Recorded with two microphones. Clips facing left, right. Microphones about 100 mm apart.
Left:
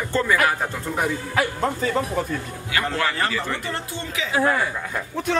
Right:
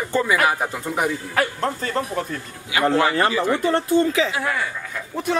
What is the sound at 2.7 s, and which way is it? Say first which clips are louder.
Speech: right 6 dB; 15° right (ahead or behind).